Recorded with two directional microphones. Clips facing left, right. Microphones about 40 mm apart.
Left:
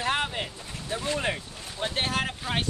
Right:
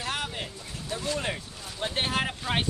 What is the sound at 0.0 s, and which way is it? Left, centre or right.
Boat, left.